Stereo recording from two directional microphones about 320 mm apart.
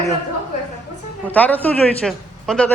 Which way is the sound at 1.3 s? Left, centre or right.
Centre.